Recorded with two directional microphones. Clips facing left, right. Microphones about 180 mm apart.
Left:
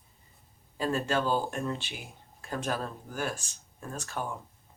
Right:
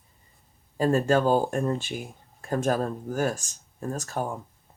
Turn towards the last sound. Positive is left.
turn(degrees=-40)  # may be behind; listen again after turning